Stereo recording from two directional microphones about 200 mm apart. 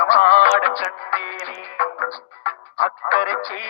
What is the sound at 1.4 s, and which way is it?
Music, 40° left (ahead or behind).